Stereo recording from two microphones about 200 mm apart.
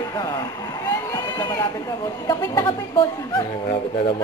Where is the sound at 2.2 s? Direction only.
15° left (ahead or behind).